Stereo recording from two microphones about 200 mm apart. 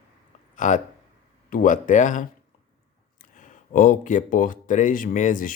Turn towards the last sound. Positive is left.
turn(degrees=40)  # may be behind; listen again after turning